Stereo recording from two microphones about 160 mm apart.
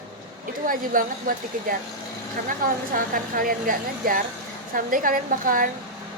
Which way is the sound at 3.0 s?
60° right (ahead or behind).